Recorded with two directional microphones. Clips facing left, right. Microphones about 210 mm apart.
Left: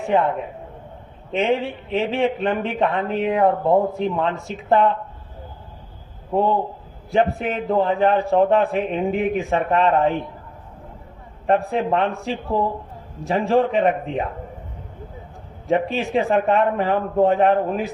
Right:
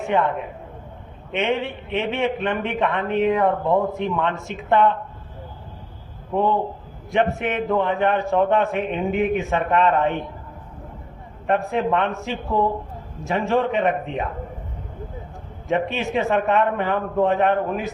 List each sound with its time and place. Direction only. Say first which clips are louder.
0.1 s a man's voice: left 2 dB; 35° left (ahead or behind)
1.3 s a man's voice: left 2 dB; 35° left (ahead or behind)
6.3 s a man's voice: left 1 dB; 35° left (ahead or behind)
11.4 s a man's voice: left 1 dB; 35° left (ahead or behind)
15.6 s a man's voice: left 2 dB; 35° left (ahead or behind)